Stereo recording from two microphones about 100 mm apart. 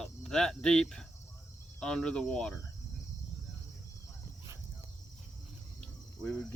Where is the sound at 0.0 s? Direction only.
5° left (ahead or behind).